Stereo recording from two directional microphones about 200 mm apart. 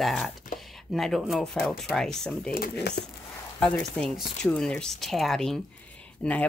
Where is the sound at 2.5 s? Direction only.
50° left (ahead or behind).